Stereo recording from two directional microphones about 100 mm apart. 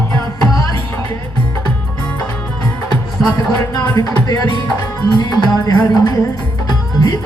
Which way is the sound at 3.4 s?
40° left (ahead or behind).